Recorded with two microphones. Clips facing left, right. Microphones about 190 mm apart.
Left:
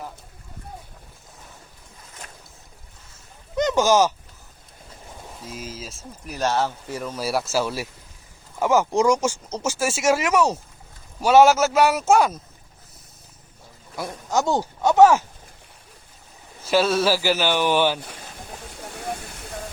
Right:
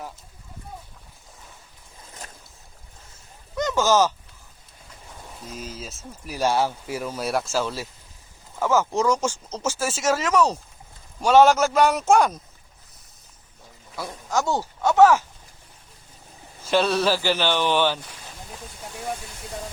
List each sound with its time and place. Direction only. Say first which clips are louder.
3.6 s speech: left 2 dB; 15° left (ahead or behind)
5.5 s speech: even; centre (ahead or behind)
13.9 s speech: left 2 dB; 15° left (ahead or behind)
16.6 s speech: left 1 dB; 5° left (ahead or behind)